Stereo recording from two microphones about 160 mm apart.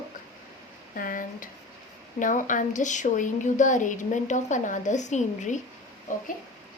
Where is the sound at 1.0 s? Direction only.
60° left (ahead or behind).